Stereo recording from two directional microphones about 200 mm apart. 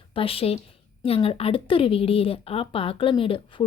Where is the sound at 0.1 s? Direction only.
30° left (ahead or behind).